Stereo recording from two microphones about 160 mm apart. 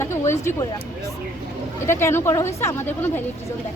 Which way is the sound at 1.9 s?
15° left (ahead or behind).